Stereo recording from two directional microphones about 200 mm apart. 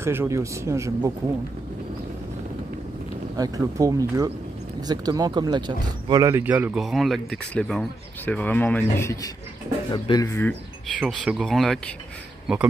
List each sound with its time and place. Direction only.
0.0 s speech: 15° right (ahead or behind)
3.3 s speech: 20° right (ahead or behind); by 10.5 s 15° left (ahead or behind)
11.0 s speech: centre (ahead or behind)